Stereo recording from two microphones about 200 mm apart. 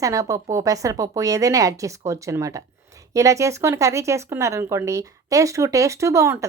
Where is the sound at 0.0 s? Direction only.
15° right (ahead or behind).